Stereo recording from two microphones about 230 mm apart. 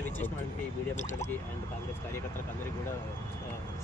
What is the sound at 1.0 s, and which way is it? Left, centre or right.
Speech, left.